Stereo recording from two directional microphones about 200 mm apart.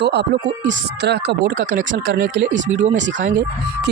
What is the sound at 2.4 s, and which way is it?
Speech, 40° right (ahead or behind).